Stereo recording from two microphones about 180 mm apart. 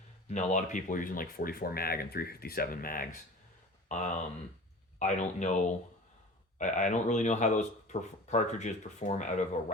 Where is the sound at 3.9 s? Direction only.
40° left (ahead or behind).